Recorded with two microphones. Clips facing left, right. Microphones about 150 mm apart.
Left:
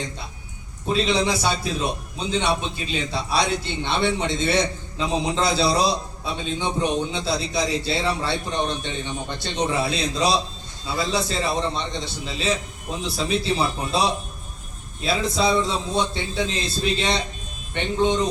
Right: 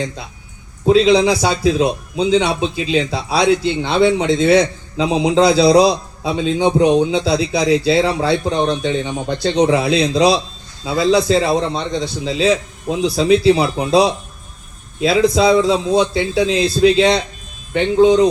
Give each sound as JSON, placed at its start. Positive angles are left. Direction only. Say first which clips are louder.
{"t": 0.9, "sound": "a man's voice", "louder": "right 10 dB", "side_deg": -90}